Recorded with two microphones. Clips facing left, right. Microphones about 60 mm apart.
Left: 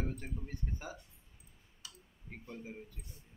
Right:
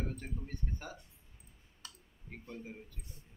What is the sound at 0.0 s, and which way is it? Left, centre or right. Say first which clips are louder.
Speech: left 1 dB; centre.